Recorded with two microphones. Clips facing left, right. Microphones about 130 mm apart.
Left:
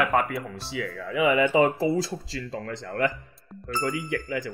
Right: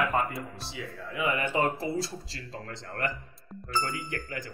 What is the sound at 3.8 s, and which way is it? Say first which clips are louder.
Speech: left 6 dB; 90° left.